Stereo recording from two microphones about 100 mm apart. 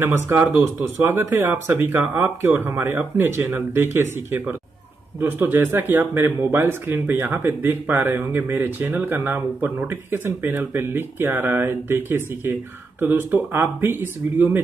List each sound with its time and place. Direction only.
0.0 s speech: 25° right (ahead or behind)